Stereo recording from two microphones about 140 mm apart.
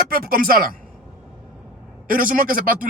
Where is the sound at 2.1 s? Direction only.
90° right.